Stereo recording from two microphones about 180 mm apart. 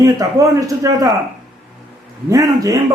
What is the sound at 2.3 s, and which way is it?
Speech, 20° right (ahead or behind).